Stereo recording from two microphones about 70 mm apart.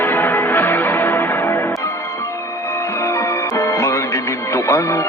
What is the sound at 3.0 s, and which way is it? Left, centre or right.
Music, left.